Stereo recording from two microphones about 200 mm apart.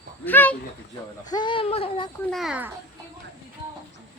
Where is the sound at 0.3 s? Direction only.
10° left (ahead or behind).